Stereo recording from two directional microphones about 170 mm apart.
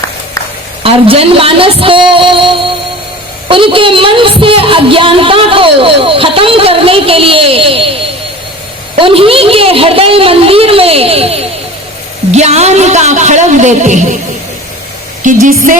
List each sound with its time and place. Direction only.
0.8 s speech: 35° right (ahead or behind)
9.0 s a man's voice: 30° right (ahead or behind)
15.2 s a man's voice: 50° right (ahead or behind)